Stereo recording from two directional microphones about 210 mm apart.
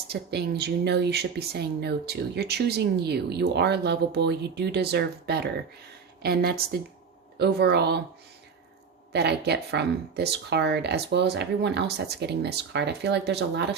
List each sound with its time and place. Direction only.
0.1 s speech: 50° right (ahead or behind)
9.1 s speech: 50° right (ahead or behind)